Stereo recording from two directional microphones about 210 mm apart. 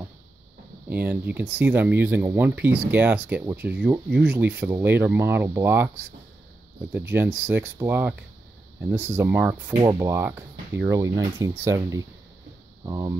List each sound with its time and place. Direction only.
0.8 s speech: 10° right (ahead or behind)
6.9 s speech: 10° right (ahead or behind)